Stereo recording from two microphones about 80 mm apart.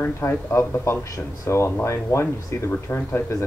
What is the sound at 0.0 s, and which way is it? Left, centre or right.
A man's voice, left.